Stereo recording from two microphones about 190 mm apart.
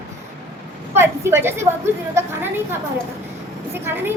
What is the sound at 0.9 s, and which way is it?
Speech, 15° right (ahead or behind).